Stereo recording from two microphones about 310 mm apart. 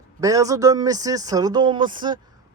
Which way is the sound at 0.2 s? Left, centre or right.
Centre.